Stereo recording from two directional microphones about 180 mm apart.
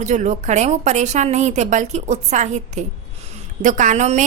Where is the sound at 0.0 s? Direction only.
40° right (ahead or behind).